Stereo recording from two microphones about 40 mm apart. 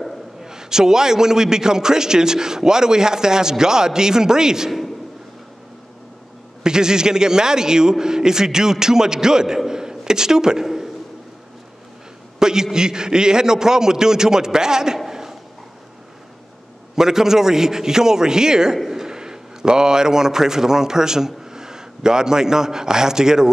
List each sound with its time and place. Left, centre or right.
0.4 s a man's voice: centre
4.6 s a sound: centre
6.6 s a man's voice: centre
12.4 s a man's voice: centre
15.0 s a sound: centre
16.9 s a man's voice: centre